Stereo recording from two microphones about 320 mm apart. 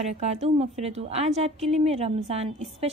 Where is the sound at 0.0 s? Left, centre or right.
Centre.